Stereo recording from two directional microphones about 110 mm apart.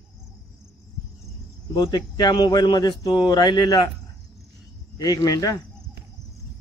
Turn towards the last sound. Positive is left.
turn(degrees=35)  # may be behind; listen again after turning